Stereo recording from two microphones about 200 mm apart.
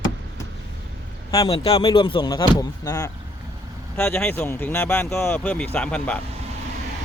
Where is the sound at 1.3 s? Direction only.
20° left (ahead or behind).